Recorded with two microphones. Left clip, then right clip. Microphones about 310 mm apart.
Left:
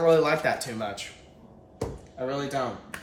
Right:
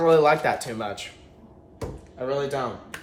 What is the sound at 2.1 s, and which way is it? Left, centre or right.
Speech, centre.